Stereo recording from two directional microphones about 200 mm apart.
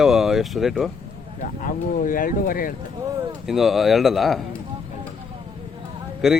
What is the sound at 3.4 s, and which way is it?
Speech, centre (ahead or behind).